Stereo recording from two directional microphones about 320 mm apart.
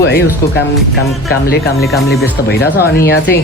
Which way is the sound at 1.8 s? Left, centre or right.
Centre.